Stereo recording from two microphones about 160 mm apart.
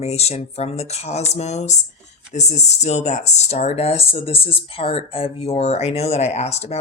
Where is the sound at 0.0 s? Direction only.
40° left (ahead or behind).